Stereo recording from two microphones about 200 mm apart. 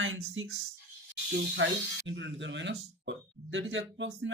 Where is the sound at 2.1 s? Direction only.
65° right (ahead or behind).